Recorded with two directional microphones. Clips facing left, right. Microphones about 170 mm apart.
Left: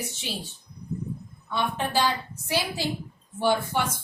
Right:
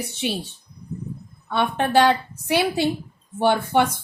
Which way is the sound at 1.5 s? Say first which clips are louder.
Right 7 dB; 65° right (ahead or behind).